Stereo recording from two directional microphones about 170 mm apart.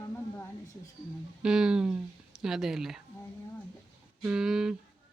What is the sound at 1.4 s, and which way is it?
Speech, 5° right (ahead or behind).